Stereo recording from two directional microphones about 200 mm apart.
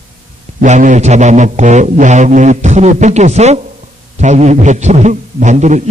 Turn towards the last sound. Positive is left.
turn(degrees=-35)  # may be behind; listen again after turning